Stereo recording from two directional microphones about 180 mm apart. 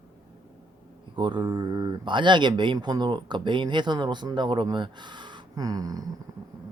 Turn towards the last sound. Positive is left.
turn(degrees=-20)  # may be behind; listen again after turning